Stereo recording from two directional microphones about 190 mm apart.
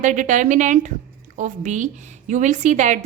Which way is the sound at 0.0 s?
40° right (ahead or behind).